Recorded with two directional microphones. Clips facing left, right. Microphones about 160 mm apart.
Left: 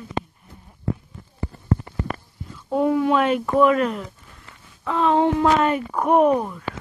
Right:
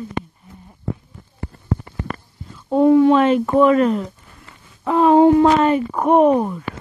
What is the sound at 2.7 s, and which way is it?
Speech, 35° right (ahead or behind).